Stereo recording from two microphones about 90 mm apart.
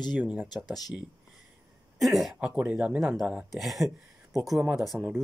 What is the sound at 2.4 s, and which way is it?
Speech, 15° right (ahead or behind).